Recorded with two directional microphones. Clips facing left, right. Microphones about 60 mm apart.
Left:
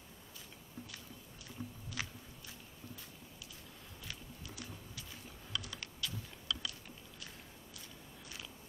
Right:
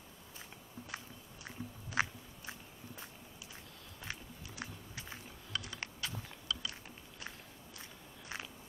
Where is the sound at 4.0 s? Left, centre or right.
Right.